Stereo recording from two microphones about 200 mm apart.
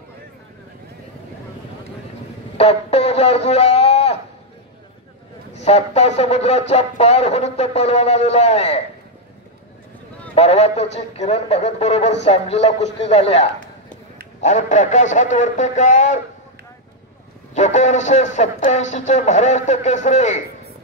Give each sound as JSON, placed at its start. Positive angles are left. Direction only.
{"t": 2.5, "sound": "a sound", "side_deg": 30}
{"t": 5.5, "sound": "speech", "side_deg": 35}
{"t": 10.3, "sound": "speech", "side_deg": 35}
{"t": 17.6, "sound": "speech", "side_deg": 35}